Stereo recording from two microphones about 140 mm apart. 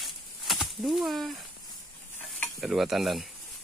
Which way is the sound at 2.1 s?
10° left (ahead or behind).